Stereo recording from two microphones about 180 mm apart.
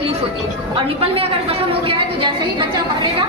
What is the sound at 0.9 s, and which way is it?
A woman's voice, 35° right (ahead or behind).